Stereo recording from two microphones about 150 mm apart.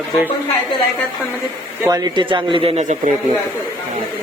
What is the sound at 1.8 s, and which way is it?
Speech, 25° right (ahead or behind).